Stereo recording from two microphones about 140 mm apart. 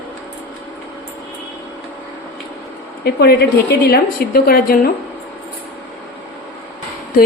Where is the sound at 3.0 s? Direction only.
90° left.